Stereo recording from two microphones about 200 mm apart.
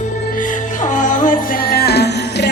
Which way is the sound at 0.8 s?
40° left (ahead or behind).